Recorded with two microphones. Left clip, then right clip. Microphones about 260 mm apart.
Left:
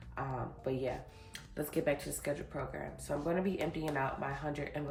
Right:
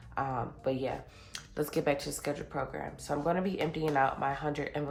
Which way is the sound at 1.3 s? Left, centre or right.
Centre.